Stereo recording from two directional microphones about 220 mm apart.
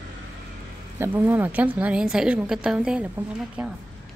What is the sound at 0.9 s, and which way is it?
A woman's voice, 10° right (ahead or behind).